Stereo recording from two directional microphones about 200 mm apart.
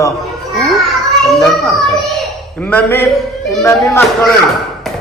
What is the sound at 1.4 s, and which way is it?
Child singing, centre (ahead or behind).